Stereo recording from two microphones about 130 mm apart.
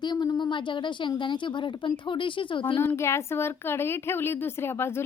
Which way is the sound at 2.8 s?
20° left (ahead or behind).